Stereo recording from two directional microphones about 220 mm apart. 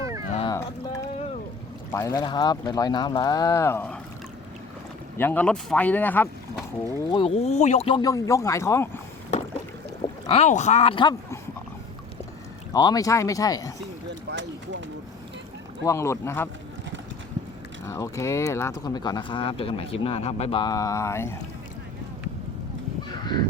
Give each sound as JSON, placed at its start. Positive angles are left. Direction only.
{"t": 0.0, "sound": "a sound", "side_deg": -15}
{"t": 0.3, "sound": "a sound", "side_deg": 25}
{"t": 1.9, "sound": "speech", "side_deg": 15}
{"t": 5.1, "sound": "speech", "side_deg": 10}
{"t": 7.1, "sound": "speech", "side_deg": 25}
{"t": 10.2, "sound": "speech", "side_deg": 30}
{"t": 12.7, "sound": "speech", "side_deg": 15}
{"t": 14.3, "sound": "speech", "side_deg": -55}
{"t": 15.8, "sound": "speech", "side_deg": 15}
{"t": 17.8, "sound": "speech", "side_deg": 15}